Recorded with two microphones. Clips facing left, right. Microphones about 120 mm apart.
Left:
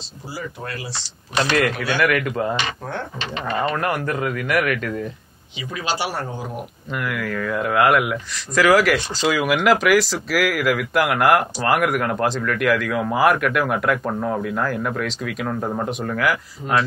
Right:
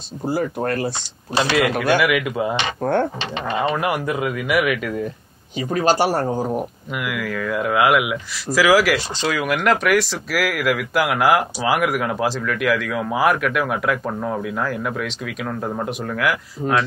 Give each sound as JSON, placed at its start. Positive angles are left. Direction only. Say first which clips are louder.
{"t": 0.3, "sound": "speech", "louder": "right 9 dB", "side_deg": -50}
{"t": 1.4, "sound": "a man's voice", "louder": "right 1 dB", "side_deg": -5}
{"t": 2.8, "sound": "speech", "louder": "right 10 dB", "side_deg": -55}
{"t": 3.6, "sound": "a man's voice", "louder": "right 2 dB", "side_deg": -10}
{"t": 5.6, "sound": "speech", "louder": "right 8 dB", "side_deg": -45}
{"t": 6.9, "sound": "speech", "louder": "left 3 dB", "side_deg": -5}